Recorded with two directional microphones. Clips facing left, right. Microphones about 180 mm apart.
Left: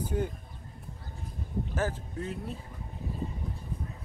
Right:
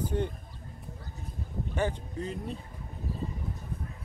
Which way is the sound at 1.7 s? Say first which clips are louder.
Right 3 dB; 5° left (ahead or behind).